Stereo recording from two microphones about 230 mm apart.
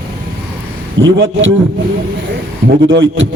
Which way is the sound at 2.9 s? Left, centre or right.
Right.